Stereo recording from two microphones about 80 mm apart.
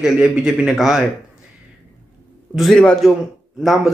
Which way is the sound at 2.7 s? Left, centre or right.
Centre.